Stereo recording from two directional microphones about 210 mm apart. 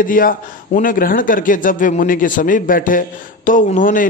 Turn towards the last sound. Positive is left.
turn(degrees=40)  # may be behind; listen again after turning